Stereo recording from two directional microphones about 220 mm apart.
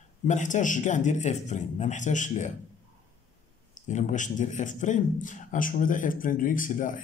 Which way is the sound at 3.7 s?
35° left (ahead or behind).